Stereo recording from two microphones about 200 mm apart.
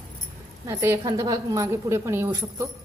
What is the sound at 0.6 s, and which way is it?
A woman's voice, 15° right (ahead or behind).